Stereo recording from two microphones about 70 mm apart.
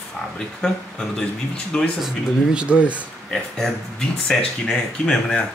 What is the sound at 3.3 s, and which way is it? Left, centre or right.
Speech, centre.